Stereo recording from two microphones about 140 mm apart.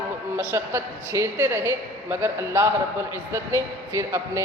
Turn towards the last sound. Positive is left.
turn(degrees=-20)  # may be behind; listen again after turning